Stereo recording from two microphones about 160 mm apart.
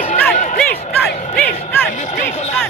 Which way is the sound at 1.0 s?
5° left (ahead or behind).